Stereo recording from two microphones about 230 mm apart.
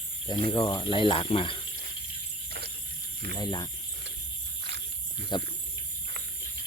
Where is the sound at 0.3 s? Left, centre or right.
Left.